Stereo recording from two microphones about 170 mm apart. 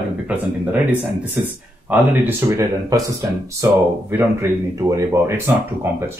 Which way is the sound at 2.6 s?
20° right (ahead or behind).